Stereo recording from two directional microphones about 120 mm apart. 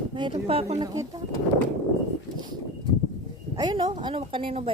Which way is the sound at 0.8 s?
30° right (ahead or behind).